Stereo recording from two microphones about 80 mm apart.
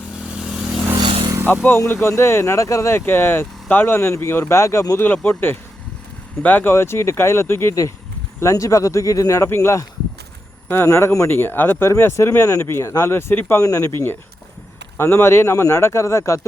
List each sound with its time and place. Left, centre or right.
0.4 s vehicle: centre
0.9 s motorcycle: right
1.5 s speech: left
5.0 s speech: left
10.8 s speech: left
11.3 s speech: left
13.7 s speech: left
14.9 s speech: left